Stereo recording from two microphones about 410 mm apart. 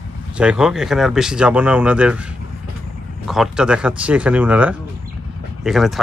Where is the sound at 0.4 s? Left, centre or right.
Centre.